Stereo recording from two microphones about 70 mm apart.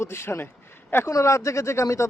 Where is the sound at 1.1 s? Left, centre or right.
Left.